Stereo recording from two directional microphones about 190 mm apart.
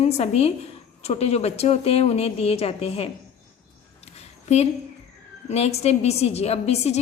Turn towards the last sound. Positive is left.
turn(degrees=35)  # may be behind; listen again after turning